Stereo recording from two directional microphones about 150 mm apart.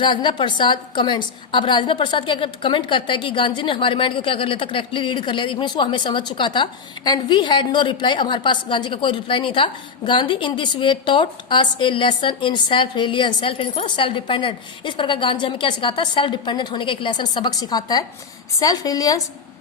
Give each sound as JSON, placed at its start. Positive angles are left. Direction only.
{"t": 0.0, "sound": "a woman's voice", "side_deg": 35}